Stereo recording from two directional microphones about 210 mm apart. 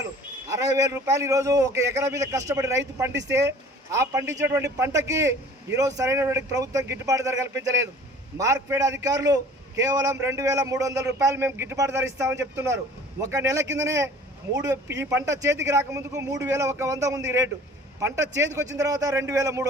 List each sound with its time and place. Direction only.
0.5 s a man's voice: 15° right (ahead or behind)